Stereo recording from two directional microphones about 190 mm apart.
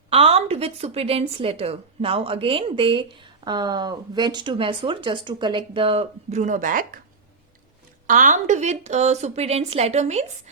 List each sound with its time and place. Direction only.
0.1 s a woman's voice: 30° right (ahead or behind)
8.0 s a woman's voice: 45° right (ahead or behind)